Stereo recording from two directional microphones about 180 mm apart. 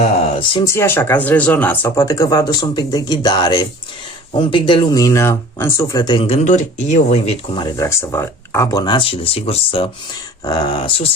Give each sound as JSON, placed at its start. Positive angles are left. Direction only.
{"t": 0.6, "sound": "speech", "side_deg": 15}